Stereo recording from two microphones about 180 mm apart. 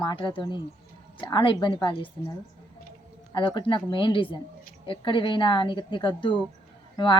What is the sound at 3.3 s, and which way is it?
Speech, 25° left (ahead or behind).